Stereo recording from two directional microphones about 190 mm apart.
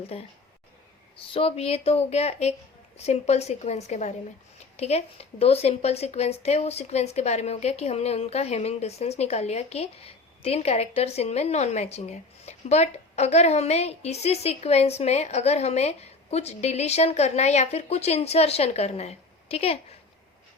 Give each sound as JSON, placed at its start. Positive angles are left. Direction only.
{"t": 0.1, "sound": "a woman's voice", "side_deg": 30}